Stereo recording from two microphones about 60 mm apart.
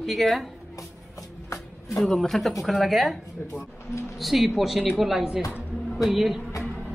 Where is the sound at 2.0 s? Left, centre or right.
Centre.